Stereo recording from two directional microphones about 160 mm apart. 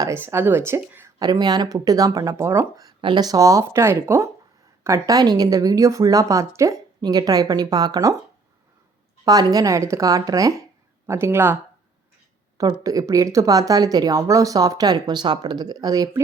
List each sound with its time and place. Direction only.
0.0 s speech: 15° right (ahead or behind)
9.2 s speech: 25° right (ahead or behind)
12.5 s speech: 20° right (ahead or behind)